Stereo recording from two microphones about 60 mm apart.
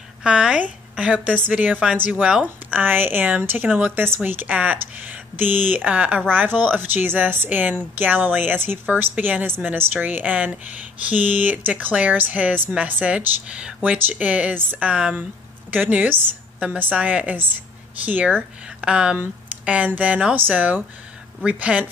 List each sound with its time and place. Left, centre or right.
0.2 s a woman's voice: centre
2.8 s a woman's voice: right
3.9 s speech: right
4.2 s a woman's voice: right
13.8 s speech: right
14.1 s a woman's voice: right